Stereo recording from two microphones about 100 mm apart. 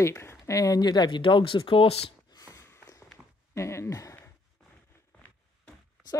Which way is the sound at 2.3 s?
35° left (ahead or behind).